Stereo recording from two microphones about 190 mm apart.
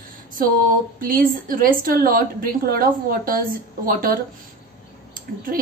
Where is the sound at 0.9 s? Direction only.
45° right (ahead or behind).